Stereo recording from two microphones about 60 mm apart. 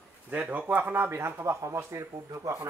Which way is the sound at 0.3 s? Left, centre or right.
Right.